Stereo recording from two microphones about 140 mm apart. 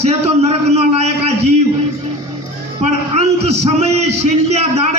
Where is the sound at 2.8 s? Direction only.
50° right (ahead or behind).